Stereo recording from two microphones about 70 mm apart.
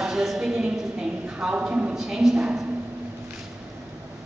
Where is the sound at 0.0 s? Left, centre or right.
Centre.